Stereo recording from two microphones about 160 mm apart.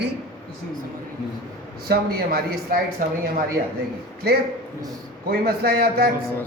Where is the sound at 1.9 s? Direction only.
70° right (ahead or behind).